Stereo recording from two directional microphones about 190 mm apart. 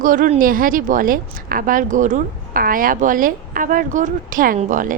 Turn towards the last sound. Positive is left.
turn(degrees=-45)  # may be behind; listen again after turning